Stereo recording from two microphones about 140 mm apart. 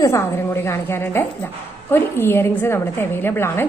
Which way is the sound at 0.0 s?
20° left (ahead or behind).